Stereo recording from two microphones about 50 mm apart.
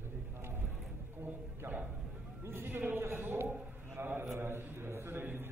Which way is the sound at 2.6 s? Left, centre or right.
Right.